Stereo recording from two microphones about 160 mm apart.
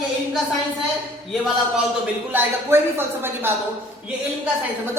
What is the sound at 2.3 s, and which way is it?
Speech, 15° right (ahead or behind).